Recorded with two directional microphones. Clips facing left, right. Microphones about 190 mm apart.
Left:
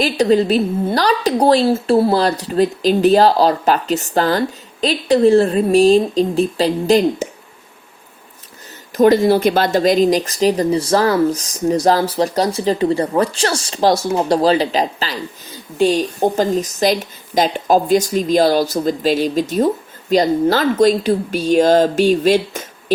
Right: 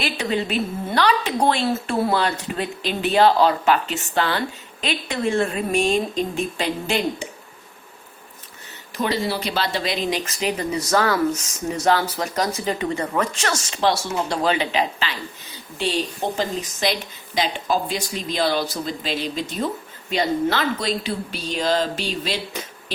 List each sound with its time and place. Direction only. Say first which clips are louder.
0.0 s a woman's voice: left 10 dB; 40° left (ahead or behind)
9.0 s speech: left 12 dB; 45° left (ahead or behind)